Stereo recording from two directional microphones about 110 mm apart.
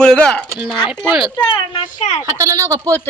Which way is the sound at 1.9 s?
90° left.